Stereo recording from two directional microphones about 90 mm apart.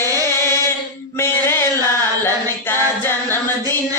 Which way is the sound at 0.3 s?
30° left (ahead or behind).